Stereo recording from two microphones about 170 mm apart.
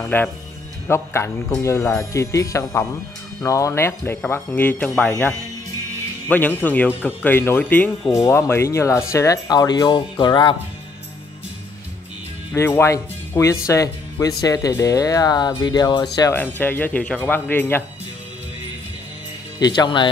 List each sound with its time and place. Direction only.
0.0 s a man's voice: 10° left (ahead or behind)
6.2 s a man's voice: 10° left (ahead or behind); by 10.5 s 25° left (ahead or behind)
12.5 s speech: 15° left (ahead or behind)
16.2 s a man's voice: 15° left (ahead or behind)
19.6 s speech: 25° left (ahead or behind)